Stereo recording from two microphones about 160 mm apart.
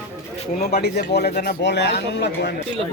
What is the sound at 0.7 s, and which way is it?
Speech, 85° left.